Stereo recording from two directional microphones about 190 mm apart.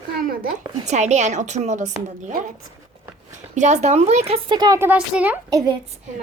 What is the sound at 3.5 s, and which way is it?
A woman's voice, 40° right (ahead or behind).